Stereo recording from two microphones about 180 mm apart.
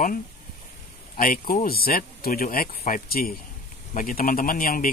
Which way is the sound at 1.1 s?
50° left (ahead or behind).